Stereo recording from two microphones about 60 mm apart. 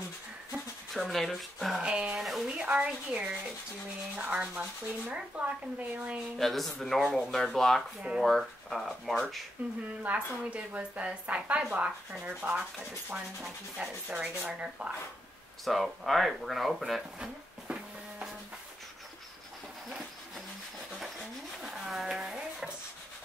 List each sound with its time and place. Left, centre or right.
0.9 s speech: centre
1.8 s sanding: centre
2.1 s speech: centre
2.4 s speech: centre
2.8 s sanding: centre
4.2 s speech: centre
6.3 s speech: centre
9.6 s speech: right
15.6 s speech: centre
17.7 s a sound: centre
21.0 s stir: centre